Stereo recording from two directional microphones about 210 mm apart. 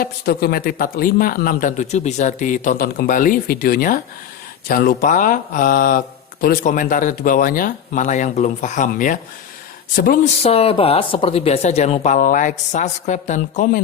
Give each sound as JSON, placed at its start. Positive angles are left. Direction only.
{"t": 0.0, "sound": "speech", "side_deg": 45}
{"t": 10.4, "sound": "speech", "side_deg": 30}